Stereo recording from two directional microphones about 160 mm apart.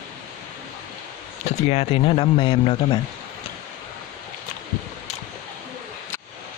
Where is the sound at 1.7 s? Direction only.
40° left (ahead or behind).